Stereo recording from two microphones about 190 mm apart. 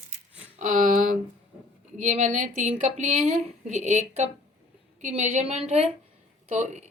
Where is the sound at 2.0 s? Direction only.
40° right (ahead or behind).